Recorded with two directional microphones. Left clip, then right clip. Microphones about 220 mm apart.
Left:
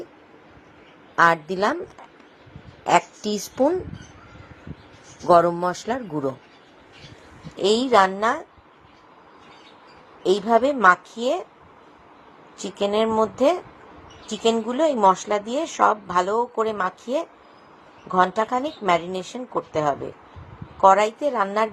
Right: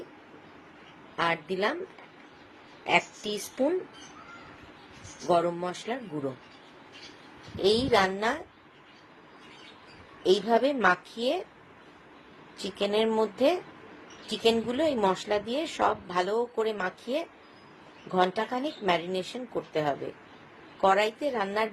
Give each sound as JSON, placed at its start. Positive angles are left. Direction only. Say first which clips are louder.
{"t": 1.1, "sound": "a woman's voice", "louder": "left 11 dB", "side_deg": 30}
{"t": 2.8, "sound": "a woman's voice", "louder": "left 7 dB", "side_deg": 30}
{"t": 5.2, "sound": "a woman's voice", "louder": "left 10 dB", "side_deg": 30}
{"t": 7.6, "sound": "a woman's voice", "louder": "left 6 dB", "side_deg": 25}
{"t": 10.2, "sound": "a woman's voice", "louder": "left 5 dB", "side_deg": 15}
{"t": 12.8, "sound": "a woman's voice", "louder": "left 6 dB", "side_deg": 15}